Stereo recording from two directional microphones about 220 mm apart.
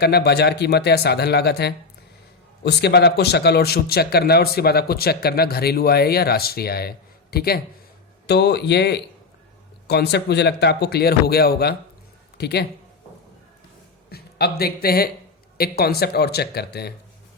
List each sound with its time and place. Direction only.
0.0 s speech: 45° left (ahead or behind)
14.1 s speech: 45° left (ahead or behind)